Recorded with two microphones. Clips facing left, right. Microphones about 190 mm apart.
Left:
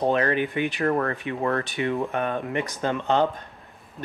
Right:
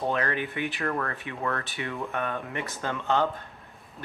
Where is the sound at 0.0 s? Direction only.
20° left (ahead or behind).